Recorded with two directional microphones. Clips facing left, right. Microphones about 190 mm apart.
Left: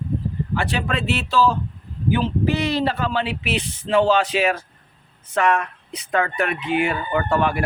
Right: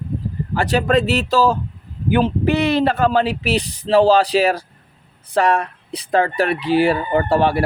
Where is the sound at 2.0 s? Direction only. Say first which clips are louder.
Right 4 dB; 55° right (ahead or behind).